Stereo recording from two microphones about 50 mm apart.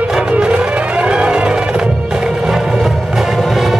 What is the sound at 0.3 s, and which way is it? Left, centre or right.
Music, right.